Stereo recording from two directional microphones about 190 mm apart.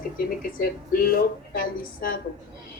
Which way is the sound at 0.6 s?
50° left (ahead or behind).